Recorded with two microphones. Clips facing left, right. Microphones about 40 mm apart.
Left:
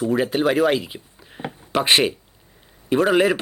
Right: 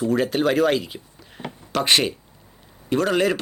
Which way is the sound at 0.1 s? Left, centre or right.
Centre.